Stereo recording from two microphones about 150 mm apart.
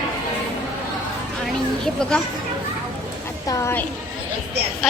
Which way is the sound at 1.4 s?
5° left (ahead or behind).